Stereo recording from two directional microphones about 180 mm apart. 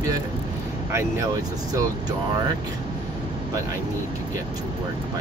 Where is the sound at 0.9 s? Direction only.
15° right (ahead or behind).